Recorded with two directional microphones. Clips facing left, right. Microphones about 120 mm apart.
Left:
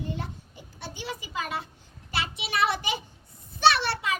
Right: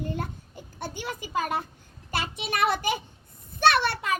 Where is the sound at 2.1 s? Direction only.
50° right (ahead or behind).